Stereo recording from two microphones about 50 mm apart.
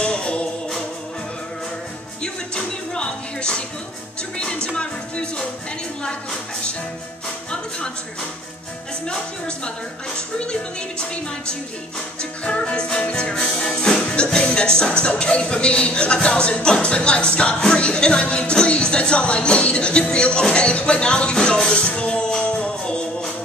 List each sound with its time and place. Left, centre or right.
0.0 s music: left
2.2 s music: centre
4.7 s music: centre
9.0 s music: centre